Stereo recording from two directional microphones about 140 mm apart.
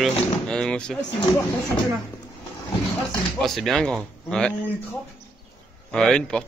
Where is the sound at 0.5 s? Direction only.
5° left (ahead or behind).